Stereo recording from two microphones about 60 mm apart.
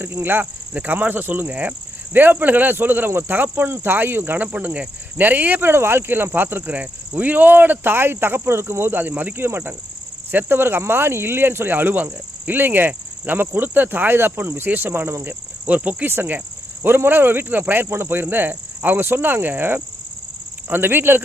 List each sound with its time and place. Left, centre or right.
0.0 s speech: right
15.2 s speech: right